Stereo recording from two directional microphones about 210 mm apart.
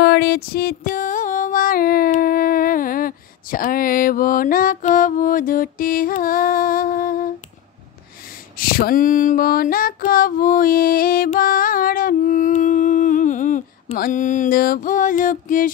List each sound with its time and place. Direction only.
0.0 s music: 50° left (ahead or behind)
8.5 s female singing: 45° left (ahead or behind)